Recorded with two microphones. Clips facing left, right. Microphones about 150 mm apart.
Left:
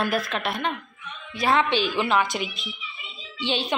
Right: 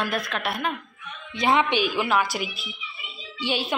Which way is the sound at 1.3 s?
20° right (ahead or behind).